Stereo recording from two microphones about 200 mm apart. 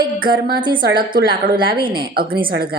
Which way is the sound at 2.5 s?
50° right (ahead or behind).